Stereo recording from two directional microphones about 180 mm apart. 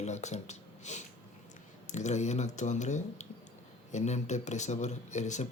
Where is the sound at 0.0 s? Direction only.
40° left (ahead or behind).